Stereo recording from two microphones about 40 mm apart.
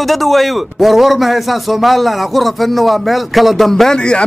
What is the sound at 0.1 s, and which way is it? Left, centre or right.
A man's voice, centre.